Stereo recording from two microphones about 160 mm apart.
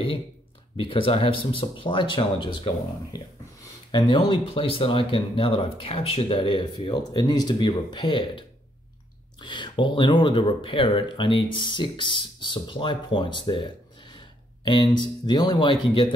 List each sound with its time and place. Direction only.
0.7 s speech: 35° left (ahead or behind)